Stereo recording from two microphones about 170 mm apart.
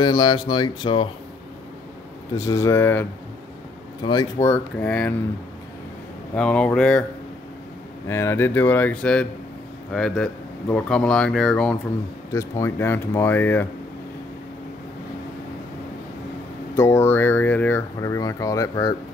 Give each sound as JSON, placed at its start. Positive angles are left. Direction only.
{"t": 0.0, "sound": "speech", "side_deg": 25}
{"t": 2.3, "sound": "speech", "side_deg": 15}
{"t": 4.0, "sound": "speech", "side_deg": 25}
{"t": 4.8, "sound": "speech", "side_deg": 5}
{"t": 6.3, "sound": "speech", "side_deg": 5}
{"t": 8.1, "sound": "speech", "side_deg": 15}
{"t": 12.3, "sound": "speech", "side_deg": 15}
{"t": 16.7, "sound": "speech", "side_deg": 15}